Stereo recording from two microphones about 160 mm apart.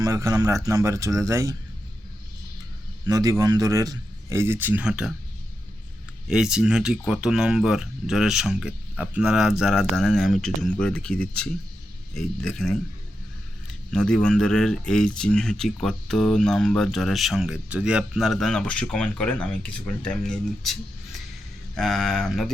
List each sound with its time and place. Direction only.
0.0 s a man's voice: 20° right (ahead or behind)
3.1 s a man's voice: 20° right (ahead or behind); by 5.1 s 5° right (ahead or behind)
6.2 s speech: 5° right (ahead or behind)